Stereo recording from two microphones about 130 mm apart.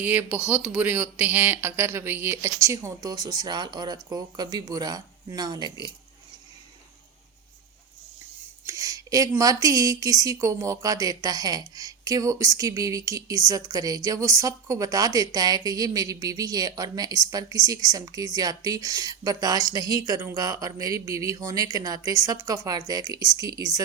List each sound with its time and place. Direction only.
0.0 s speech: 15° right (ahead or behind); by 5.7 s 35° right (ahead or behind)
8.6 s speech: 25° right (ahead or behind)